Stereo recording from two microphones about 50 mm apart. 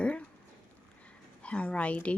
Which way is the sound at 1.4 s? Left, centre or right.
Left.